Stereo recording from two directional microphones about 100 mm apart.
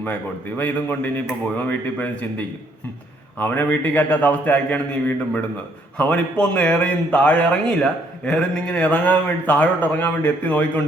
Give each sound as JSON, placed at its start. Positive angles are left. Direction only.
{"t": 0.0, "sound": "a man's voice", "side_deg": 20}
{"t": 3.3, "sound": "a man's voice", "side_deg": 20}